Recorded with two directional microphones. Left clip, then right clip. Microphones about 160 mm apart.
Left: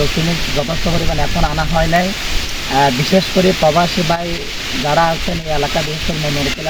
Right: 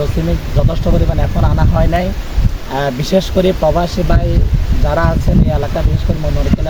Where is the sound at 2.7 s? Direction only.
25° right (ahead or behind).